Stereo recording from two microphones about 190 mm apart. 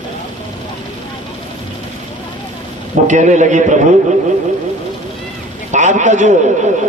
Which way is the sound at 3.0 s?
40° right (ahead or behind).